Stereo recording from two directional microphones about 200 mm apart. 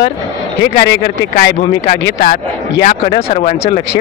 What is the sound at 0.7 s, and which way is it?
Speech, 60° left (ahead or behind).